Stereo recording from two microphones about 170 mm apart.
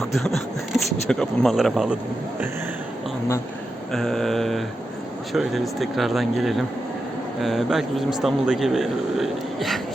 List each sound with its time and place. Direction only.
0.2 s speech: centre (ahead or behind)
3.9 s speech: centre (ahead or behind)